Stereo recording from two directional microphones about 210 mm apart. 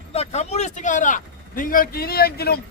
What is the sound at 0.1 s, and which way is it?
Speech, 30° left (ahead or behind).